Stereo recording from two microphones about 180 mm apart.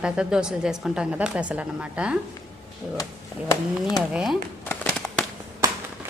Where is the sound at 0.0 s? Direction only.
5° right (ahead or behind).